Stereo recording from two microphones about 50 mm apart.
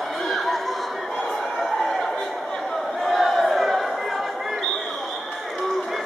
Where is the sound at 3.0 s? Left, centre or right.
Centre.